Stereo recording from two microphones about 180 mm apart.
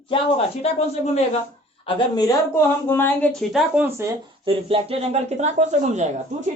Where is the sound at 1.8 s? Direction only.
20° left (ahead or behind); by 3.6 s 5° left (ahead or behind).